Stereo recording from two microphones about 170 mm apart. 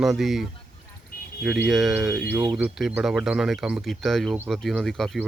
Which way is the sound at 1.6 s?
Centre (ahead or behind).